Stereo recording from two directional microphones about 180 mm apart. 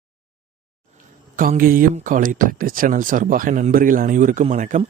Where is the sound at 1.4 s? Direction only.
50° right (ahead or behind).